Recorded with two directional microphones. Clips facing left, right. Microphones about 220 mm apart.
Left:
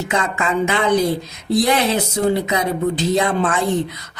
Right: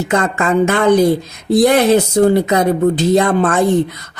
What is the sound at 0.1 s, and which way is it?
Speech, 50° right (ahead or behind).